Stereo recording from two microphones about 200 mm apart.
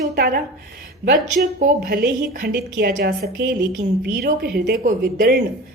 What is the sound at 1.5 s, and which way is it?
A woman's voice, 45° right (ahead or behind).